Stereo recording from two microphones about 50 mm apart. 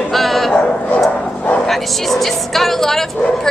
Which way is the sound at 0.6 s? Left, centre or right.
Left.